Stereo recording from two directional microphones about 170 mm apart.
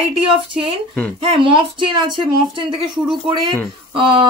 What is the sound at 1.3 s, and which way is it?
Speech, 30° right (ahead or behind).